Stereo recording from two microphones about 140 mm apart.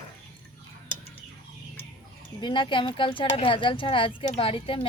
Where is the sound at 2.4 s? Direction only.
35° left (ahead or behind).